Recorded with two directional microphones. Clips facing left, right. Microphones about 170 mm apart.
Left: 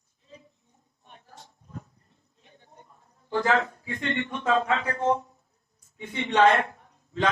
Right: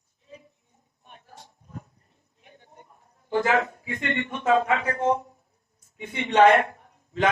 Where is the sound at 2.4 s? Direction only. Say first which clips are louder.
Right 2 dB; 15° right (ahead or behind).